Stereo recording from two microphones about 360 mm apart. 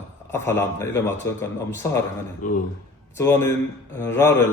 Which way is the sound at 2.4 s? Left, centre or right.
Left.